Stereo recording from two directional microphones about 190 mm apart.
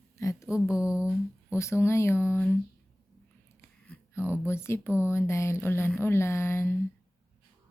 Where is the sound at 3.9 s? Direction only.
10° left (ahead or behind).